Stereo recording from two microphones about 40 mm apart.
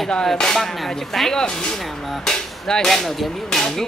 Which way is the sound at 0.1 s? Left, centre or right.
Centre.